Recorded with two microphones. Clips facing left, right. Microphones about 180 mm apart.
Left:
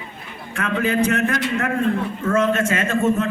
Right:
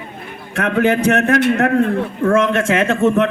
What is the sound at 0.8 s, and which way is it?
A woman's voice, 70° right (ahead or behind).